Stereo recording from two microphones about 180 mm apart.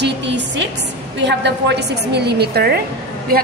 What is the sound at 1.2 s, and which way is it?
A woman's voice, 75° right (ahead or behind).